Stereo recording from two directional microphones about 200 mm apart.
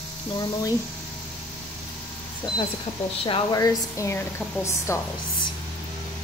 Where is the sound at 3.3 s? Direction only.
20° left (ahead or behind).